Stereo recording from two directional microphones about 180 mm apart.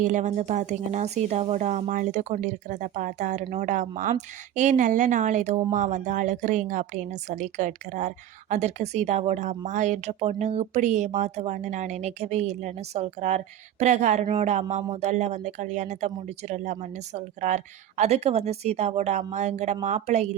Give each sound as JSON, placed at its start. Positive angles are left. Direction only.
{"t": 0.0, "sound": "speech", "side_deg": -45}